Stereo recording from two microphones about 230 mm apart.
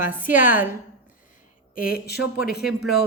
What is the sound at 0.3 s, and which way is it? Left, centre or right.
Speech, left.